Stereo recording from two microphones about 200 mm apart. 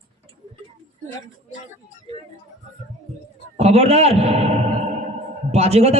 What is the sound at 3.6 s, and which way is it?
A man's voice, 30° right (ahead or behind).